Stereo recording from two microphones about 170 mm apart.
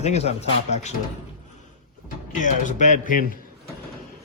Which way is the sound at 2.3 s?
45° left (ahead or behind).